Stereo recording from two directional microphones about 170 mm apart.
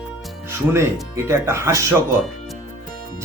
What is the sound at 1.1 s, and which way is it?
Speech, 15° right (ahead or behind).